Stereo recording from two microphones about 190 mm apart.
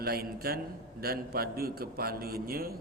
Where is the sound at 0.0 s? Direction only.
55° right (ahead or behind).